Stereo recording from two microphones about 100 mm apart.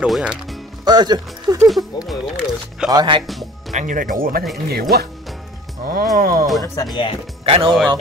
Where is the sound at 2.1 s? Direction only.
Centre (ahead or behind).